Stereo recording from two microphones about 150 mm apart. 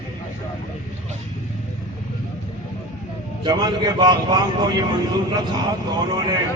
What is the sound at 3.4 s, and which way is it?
Speech, 30° right (ahead or behind).